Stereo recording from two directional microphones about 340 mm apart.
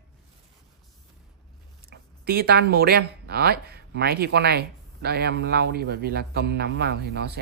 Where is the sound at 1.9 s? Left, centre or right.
Right.